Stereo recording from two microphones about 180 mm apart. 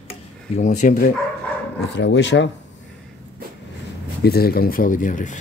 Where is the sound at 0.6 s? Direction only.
40° left (ahead or behind).